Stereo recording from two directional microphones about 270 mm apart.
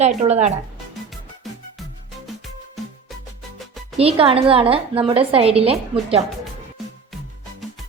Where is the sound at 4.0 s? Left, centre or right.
Right.